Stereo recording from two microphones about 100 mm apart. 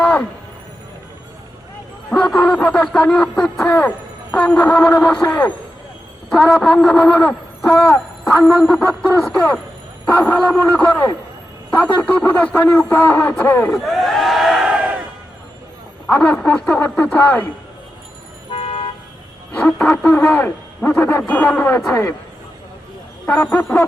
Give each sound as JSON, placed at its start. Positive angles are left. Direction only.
{"t": 0.0, "sound": "music", "side_deg": 10}
{"t": 2.0, "sound": "a man's voice", "side_deg": 5}
{"t": 13.7, "sound": "crowd", "side_deg": 0}
{"t": 16.0, "sound": "a man's voice", "side_deg": 15}
{"t": 18.5, "sound": "toot", "side_deg": 70}
{"t": 19.5, "sound": "a man's voice", "side_deg": 15}
{"t": 23.2, "sound": "speech", "side_deg": 20}